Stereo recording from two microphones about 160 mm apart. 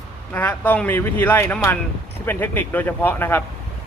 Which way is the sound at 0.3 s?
10° left (ahead or behind).